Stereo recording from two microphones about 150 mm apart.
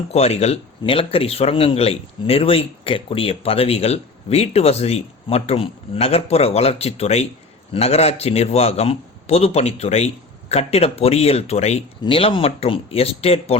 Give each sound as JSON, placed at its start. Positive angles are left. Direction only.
{"t": 0.1, "sound": "a man's voice", "side_deg": 45}